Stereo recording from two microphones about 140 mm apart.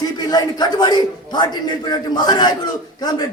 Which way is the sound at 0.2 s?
30° left (ahead or behind).